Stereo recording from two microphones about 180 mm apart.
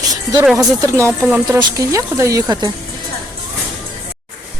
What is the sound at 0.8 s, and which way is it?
Speech, 15° right (ahead or behind).